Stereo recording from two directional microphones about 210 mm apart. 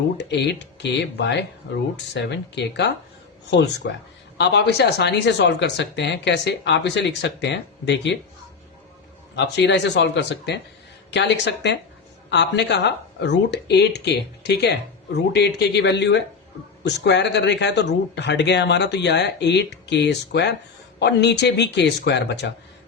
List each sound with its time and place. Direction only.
0.2 s speech: 55° left (ahead or behind)
9.3 s speech: 55° left (ahead or behind)